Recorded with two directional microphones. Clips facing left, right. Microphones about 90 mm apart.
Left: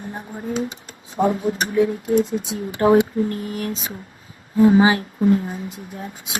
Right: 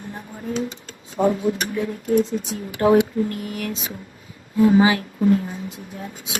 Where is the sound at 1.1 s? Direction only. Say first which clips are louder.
Even; 30° left (ahead or behind).